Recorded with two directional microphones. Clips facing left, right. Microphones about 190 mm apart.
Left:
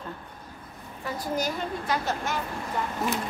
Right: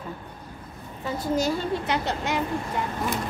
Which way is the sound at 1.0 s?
25° right (ahead or behind).